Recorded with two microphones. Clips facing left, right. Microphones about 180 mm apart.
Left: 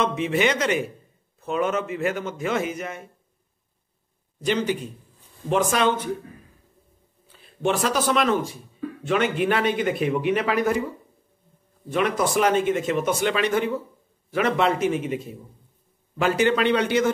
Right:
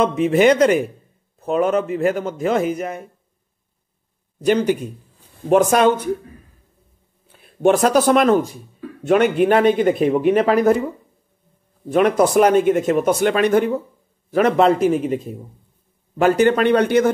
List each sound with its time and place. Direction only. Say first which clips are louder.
0.2 s a man's voice: right 9 dB; 40° right (ahead or behind)
4.5 s speech: right 7 dB; 50° right (ahead or behind)
7.3 s speech: right 8 dB; 50° right (ahead or behind)
11.9 s a man's voice: right 8 dB; 45° right (ahead or behind)